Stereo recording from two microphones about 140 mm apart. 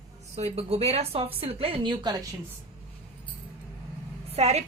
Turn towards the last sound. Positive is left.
turn(degrees=-50)  # may be behind; listen again after turning